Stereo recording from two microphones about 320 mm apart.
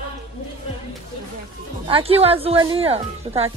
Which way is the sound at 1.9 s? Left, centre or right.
Centre.